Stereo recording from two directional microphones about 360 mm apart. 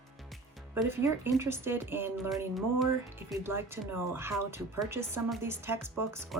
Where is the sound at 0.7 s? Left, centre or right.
Centre.